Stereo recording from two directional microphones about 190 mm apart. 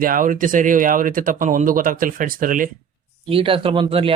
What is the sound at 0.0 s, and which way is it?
Speech, 45° right (ahead or behind).